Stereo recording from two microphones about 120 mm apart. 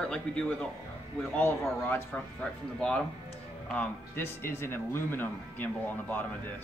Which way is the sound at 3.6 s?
10° left (ahead or behind).